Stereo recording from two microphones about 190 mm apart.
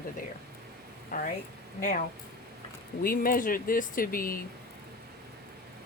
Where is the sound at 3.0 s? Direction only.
50° left (ahead or behind).